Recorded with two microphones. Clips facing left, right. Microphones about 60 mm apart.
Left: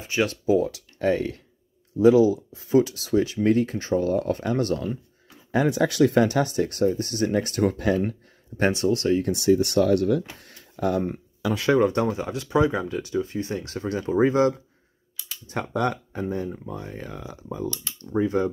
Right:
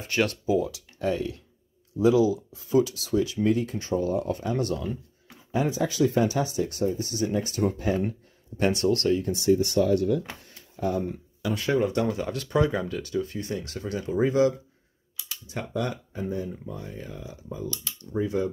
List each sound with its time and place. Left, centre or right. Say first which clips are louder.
0.5 s speech: left 4 dB; left
5.5 s speech: left 4 dB; left
8.7 s speech: left 1 dB; centre
9.2 s speech: left 2 dB; left
11.9 s speech: left 2 dB; left
12.3 s speech: left 3 dB; centre; by 14.5 s left
15.4 s speech: left 5 dB; left
18.1 s speech: left 4 dB; left